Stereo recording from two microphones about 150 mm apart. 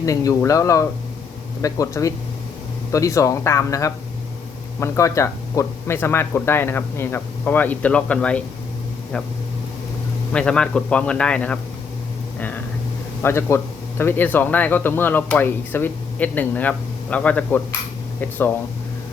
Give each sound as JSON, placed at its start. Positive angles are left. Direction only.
{"t": 0.0, "sound": "speech", "side_deg": 20}
{"t": 10.3, "sound": "speech", "side_deg": 5}
{"t": 13.2, "sound": "speech", "side_deg": 15}